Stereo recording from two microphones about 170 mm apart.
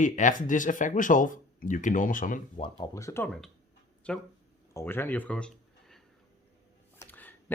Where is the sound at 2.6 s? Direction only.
30° left (ahead or behind).